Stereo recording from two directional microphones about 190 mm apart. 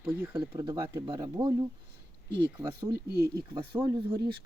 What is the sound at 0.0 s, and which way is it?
Speech, 5° right (ahead or behind).